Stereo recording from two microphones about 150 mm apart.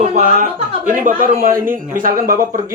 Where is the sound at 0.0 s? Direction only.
55° right (ahead or behind).